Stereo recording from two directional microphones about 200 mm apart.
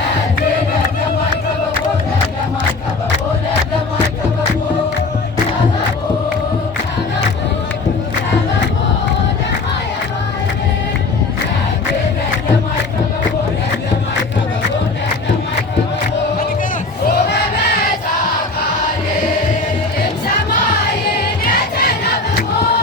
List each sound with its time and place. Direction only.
17.1 s battle cry: 55° left (ahead or behind)
21.4 s music: 50° left (ahead or behind)